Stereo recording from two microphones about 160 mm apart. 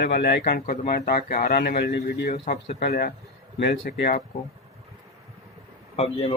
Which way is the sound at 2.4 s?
80° left.